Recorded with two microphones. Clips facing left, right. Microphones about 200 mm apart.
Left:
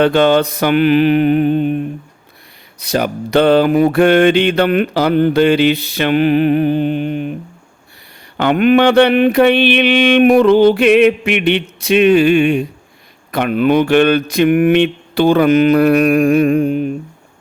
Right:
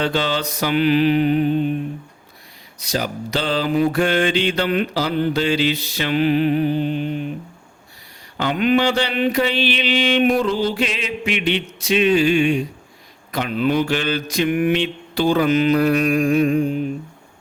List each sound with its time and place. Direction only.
0.0 s mantra: 55° left (ahead or behind)
8.4 s mantra: 60° left (ahead or behind)